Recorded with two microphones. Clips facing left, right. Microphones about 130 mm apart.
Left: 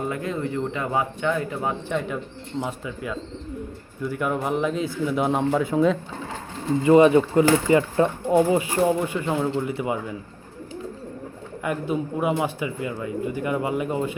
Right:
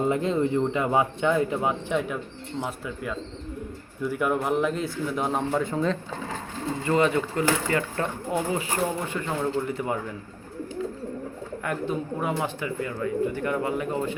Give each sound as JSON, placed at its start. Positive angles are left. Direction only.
{"t": 0.0, "sound": "speech", "side_deg": -25}
{"t": 1.9, "sound": "a man's voice", "side_deg": -5}
{"t": 6.8, "sound": "speech", "side_deg": 20}
{"t": 11.6, "sound": "speech", "side_deg": 10}